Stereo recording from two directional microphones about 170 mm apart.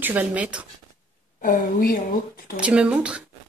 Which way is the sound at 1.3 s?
50° left (ahead or behind).